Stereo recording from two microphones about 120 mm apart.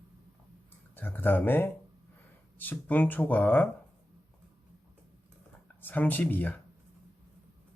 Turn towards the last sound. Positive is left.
turn(degrees=15)  # may be behind; listen again after turning